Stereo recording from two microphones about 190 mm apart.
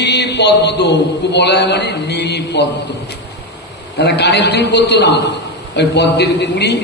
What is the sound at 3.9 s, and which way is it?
A man's voice, 60° left (ahead or behind).